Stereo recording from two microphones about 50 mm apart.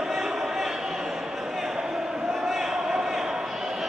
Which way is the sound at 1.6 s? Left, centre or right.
Centre.